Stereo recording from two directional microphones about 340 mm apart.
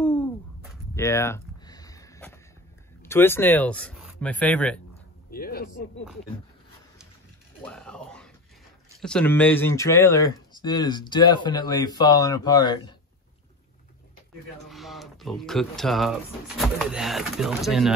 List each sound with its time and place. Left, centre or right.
0.0 s owl: centre
0.9 s a sound: centre
3.0 s speech: centre
5.3 s speech: left
7.6 s a sound: centre
8.9 s speech: centre
14.7 s speech: centre